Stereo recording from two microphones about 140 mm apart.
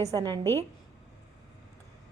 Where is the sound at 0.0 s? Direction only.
25° right (ahead or behind).